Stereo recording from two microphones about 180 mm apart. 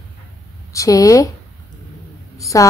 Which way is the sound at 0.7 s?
20° left (ahead or behind).